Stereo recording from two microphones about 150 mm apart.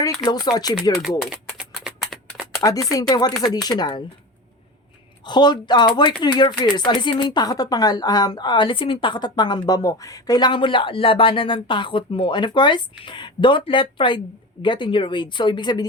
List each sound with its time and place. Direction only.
0.3 s speech: 25° left (ahead or behind)
1.2 s a sound: 5° right (ahead or behind)
2.6 s speech: 25° left (ahead or behind)
5.2 s speech: 30° left (ahead or behind)